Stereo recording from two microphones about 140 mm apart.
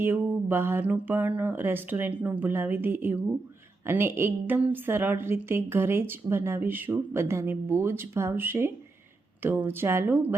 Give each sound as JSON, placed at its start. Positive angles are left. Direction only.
{"t": 0.0, "sound": "a woman's voice", "side_deg": -15}